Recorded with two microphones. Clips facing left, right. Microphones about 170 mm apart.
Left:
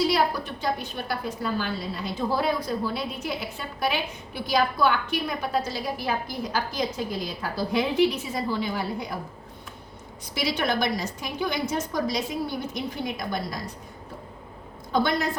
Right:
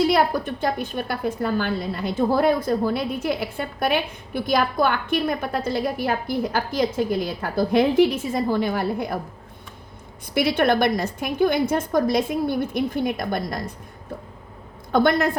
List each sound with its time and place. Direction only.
0.0 s a woman's voice: 50° right (ahead or behind)
10.3 s a woman's voice: 55° right (ahead or behind)
14.9 s a woman's voice: 55° right (ahead or behind)